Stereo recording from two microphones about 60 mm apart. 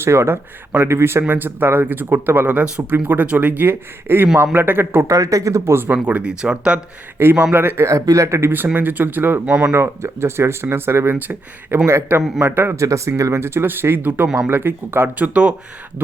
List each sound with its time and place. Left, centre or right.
0.0 s speech: right
5.0 s speech: right
5.7 s speech: right
6.1 s speech: centre
7.2 s speech: right
7.9 s speech: right
8.4 s speech: right
9.5 s speech: right
9.7 s speech: right
11.9 s speech: right
12.7 s speech: right
15.2 s speech: right